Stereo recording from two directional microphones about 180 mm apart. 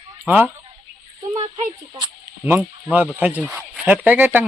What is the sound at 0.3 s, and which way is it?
Speech, 10° right (ahead or behind).